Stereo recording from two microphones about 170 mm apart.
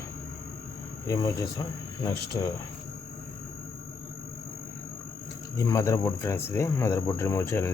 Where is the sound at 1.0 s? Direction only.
20° left (ahead or behind).